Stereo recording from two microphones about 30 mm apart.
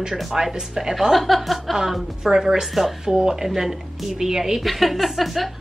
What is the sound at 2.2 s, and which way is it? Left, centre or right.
Speech, centre.